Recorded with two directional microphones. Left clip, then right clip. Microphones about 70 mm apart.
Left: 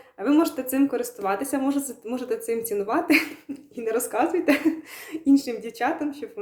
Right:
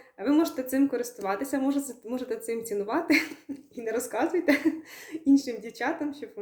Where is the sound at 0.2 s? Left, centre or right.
Left.